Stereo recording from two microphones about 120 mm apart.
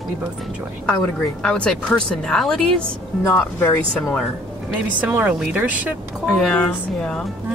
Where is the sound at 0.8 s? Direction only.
10° left (ahead or behind).